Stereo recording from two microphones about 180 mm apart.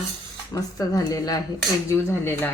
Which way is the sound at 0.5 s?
20° left (ahead or behind).